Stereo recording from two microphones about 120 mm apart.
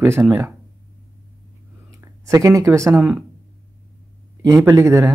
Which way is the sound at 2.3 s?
25° right (ahead or behind).